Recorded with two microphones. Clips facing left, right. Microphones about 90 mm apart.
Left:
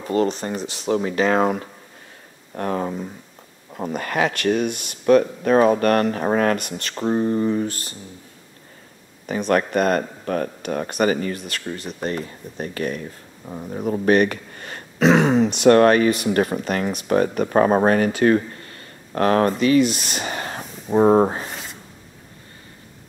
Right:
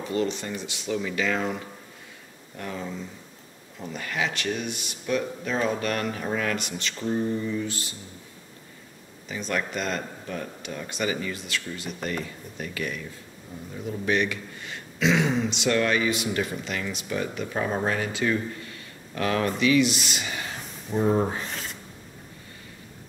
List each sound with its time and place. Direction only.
0.1 s speech: 45° left (ahead or behind)
9.2 s speech: 55° left (ahead or behind)
13.5 s speech: 55° left (ahead or behind)
21.5 s rub: 5° left (ahead or behind)